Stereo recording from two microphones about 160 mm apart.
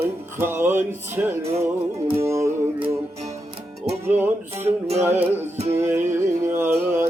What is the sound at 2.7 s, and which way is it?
Music, 35° right (ahead or behind).